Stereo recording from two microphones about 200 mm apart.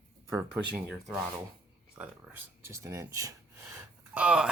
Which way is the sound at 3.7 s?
5° right (ahead or behind).